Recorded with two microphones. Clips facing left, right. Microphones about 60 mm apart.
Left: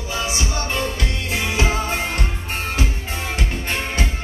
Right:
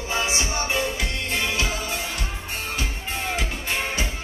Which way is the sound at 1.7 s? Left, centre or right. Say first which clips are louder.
Left 6 dB; left.